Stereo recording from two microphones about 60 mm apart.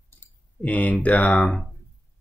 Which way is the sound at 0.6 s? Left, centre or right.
Left.